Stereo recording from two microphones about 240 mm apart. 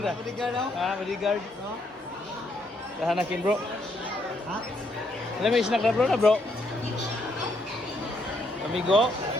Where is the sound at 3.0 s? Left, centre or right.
Centre.